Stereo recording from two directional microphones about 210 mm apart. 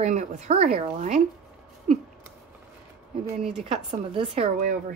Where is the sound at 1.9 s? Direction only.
30° right (ahead or behind).